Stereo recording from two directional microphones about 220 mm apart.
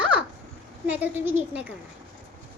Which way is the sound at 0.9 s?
10° right (ahead or behind).